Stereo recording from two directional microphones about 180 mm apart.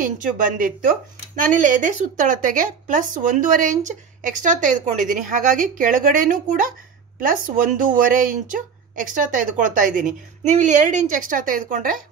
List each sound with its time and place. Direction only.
0.0 s speech: 50° right (ahead or behind)